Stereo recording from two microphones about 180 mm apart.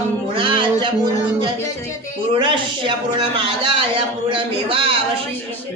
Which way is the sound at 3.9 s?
30° right (ahead or behind).